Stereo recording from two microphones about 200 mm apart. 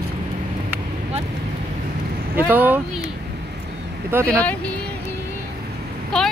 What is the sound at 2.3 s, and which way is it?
Speech, 10° right (ahead or behind).